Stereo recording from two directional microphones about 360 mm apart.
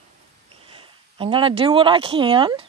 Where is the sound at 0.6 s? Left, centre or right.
Centre.